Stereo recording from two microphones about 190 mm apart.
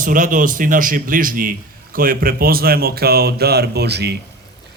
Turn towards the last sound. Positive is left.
turn(degrees=-60)  # may be behind; listen again after turning